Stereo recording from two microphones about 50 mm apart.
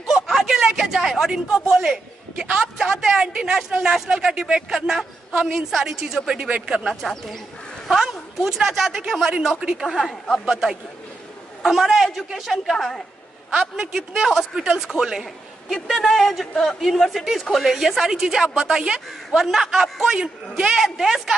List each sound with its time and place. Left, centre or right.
0.1 s a sound: centre
1.3 s a man's voice: centre
6.5 s speech: right
6.9 s a woman's voice: centre
12.7 s a woman's voice: centre
13.5 s a man's voice: centre
16.1 s a woman's voice: centre
20.8 s a woman's voice: centre